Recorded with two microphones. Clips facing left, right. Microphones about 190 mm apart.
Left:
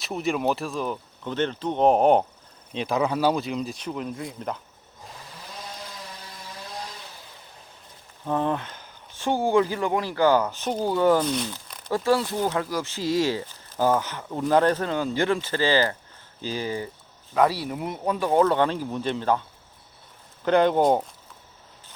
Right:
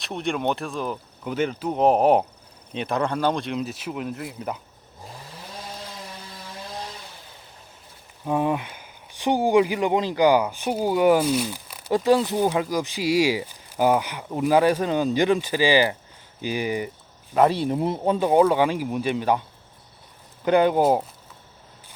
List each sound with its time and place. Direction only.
0.0 s speech: centre (ahead or behind)
8.2 s speech: 10° right (ahead or behind); by 18.3 s 25° right (ahead or behind)
18.3 s speech: 10° right (ahead or behind)
20.4 s speech: 10° right (ahead or behind)